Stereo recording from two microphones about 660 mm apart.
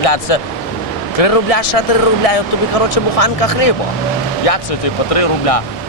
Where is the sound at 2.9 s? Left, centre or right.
Left.